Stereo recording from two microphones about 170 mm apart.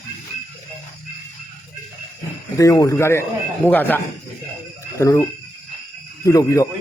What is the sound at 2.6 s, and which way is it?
A man's voice, 20° left (ahead or behind).